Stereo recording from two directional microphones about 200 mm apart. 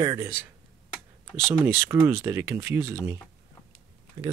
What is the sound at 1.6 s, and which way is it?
Speech, 10° right (ahead or behind).